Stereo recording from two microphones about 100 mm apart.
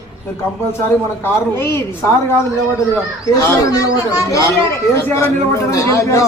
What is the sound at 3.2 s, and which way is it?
A man's voice, 35° left (ahead or behind).